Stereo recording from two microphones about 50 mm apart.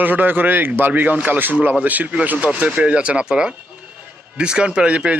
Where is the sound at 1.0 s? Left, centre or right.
Right.